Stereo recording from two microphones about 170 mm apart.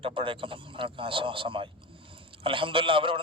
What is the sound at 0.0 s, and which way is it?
A man's voice, 30° right (ahead or behind).